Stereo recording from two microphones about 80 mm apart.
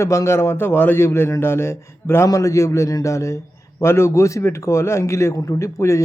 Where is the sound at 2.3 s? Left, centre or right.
Left.